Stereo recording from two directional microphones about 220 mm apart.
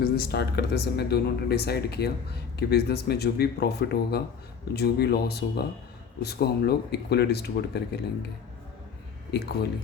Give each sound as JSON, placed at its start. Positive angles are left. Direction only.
{"t": 0.0, "sound": "speech", "side_deg": 45}
{"t": 9.3, "sound": "speech", "side_deg": 50}